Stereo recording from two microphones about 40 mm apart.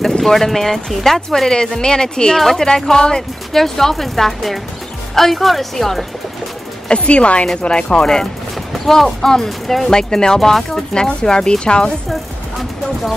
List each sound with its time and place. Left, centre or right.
0.2 s speech: centre
1.6 s speech: centre
2.3 s speech: centre
2.6 s speech: centre
3.5 s speech: centre
6.9 s speech: left
8.7 s speech: centre
12.1 s vehicle: centre